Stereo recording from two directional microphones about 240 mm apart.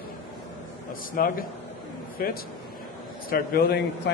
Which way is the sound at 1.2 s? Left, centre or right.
Left.